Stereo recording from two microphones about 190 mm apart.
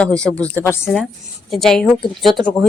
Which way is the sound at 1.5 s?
Centre (ahead or behind).